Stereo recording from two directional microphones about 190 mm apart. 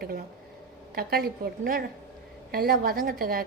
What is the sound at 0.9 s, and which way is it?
A woman's voice, 55° right (ahead or behind).